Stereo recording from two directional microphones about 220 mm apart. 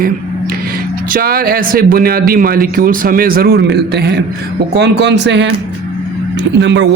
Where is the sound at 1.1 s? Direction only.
45° right (ahead or behind).